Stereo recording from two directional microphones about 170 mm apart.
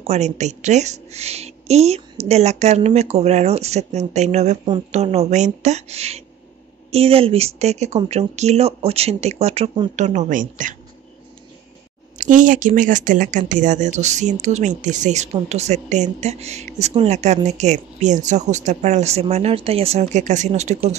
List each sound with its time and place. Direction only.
0.0 s speech: 40° right (ahead or behind)
12.2 s speech: 50° right (ahead or behind)